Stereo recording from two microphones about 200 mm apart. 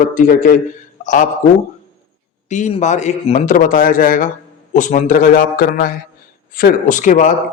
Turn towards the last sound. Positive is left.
turn(degrees=40)  # may be behind; listen again after turning